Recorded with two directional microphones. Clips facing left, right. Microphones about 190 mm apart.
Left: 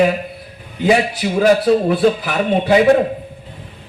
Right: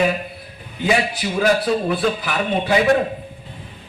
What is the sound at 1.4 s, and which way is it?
A man's voice, 35° left (ahead or behind).